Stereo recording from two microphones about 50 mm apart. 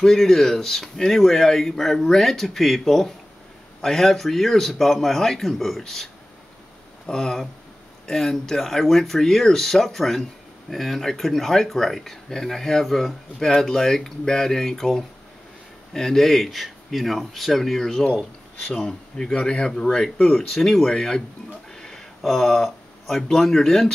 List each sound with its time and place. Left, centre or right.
0.0 s speech: centre
7.1 s speech: centre